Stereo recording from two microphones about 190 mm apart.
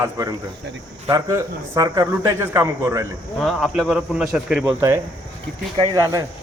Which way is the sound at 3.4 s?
Centre (ahead or behind).